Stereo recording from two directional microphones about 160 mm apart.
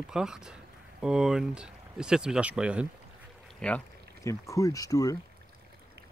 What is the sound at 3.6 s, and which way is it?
Speech, 5° left (ahead or behind).